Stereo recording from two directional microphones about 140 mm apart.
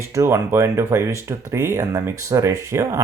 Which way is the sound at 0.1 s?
20° right (ahead or behind).